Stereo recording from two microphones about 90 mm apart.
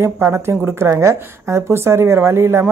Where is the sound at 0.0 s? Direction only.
25° right (ahead or behind).